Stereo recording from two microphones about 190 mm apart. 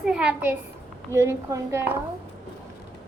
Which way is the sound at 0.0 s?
5° right (ahead or behind).